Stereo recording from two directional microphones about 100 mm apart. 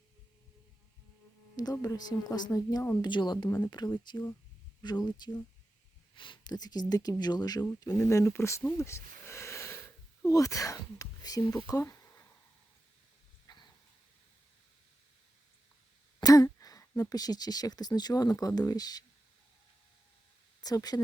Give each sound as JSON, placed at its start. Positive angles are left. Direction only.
{"t": 1.5, "sound": "speech", "side_deg": 40}
{"t": 6.1, "sound": "speech", "side_deg": 55}
{"t": 8.0, "sound": "speech", "side_deg": 25}
{"t": 8.8, "sound": "a sound", "side_deg": 30}
{"t": 10.2, "sound": "speech", "side_deg": 35}
{"t": 13.5, "sound": "a sound", "side_deg": 45}
{"t": 16.2, "sound": "speech", "side_deg": 35}
{"t": 20.6, "sound": "speech", "side_deg": 40}